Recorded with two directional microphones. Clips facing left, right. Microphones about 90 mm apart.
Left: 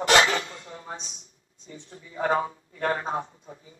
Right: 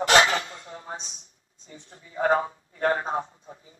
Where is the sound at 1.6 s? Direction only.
30° right (ahead or behind).